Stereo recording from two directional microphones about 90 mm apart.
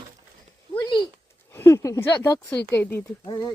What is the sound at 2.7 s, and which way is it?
Speech, 20° left (ahead or behind).